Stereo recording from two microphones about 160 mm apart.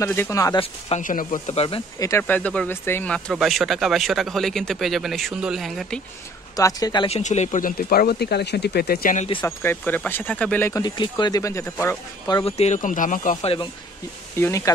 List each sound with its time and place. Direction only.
0.0 s speech: 15° left (ahead or behind)
0.6 s speech: 40° left (ahead or behind)
1.0 s speech: 55° left (ahead or behind)
1.5 s speech: 40° left (ahead or behind)
2.0 s speech: 15° left (ahead or behind); by 5.9 s centre (ahead or behind)
6.5 s speech: 25° left (ahead or behind)
7.1 s speech: 45° left (ahead or behind)
7.7 s speech: 70° left (ahead or behind)
9.4 s speech: 15° left (ahead or behind)
10.8 s speech: 25° left (ahead or behind)
12.4 s speech: 45° left (ahead or behind)
13.4 s speech: 35° left (ahead or behind)
14.4 s speech: 20° left (ahead or behind)